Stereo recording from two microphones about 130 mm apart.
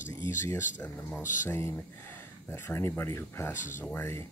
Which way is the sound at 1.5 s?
20° left (ahead or behind).